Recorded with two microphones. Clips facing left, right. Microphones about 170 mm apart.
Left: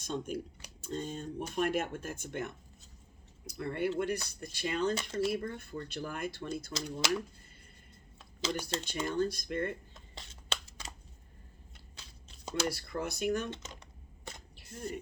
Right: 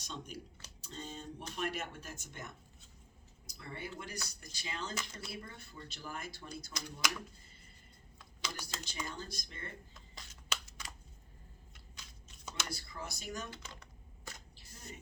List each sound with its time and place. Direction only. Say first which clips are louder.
0.0 s speech: left 10 dB; 50° left (ahead or behind)
6.7 s speech: left 2 dB; 25° left (ahead or behind)
8.2 s speech: left 10 dB; 25° left (ahead or behind)
9.0 s speech: left 14 dB; 55° left (ahead or behind)
9.9 s shuffling cards: left 4 dB; 25° left (ahead or behind)
12.5 s speech: left 11 dB; 30° left (ahead or behind)
12.7 s speech: left 8 dB; 60° left (ahead or behind)